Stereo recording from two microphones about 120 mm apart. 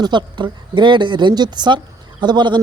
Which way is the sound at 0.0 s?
40° right (ahead or behind).